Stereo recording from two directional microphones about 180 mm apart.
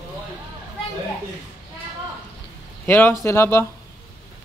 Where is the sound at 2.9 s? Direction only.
10° left (ahead or behind).